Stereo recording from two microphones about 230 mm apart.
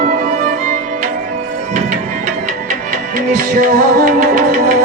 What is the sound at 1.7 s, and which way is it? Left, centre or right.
Music, right.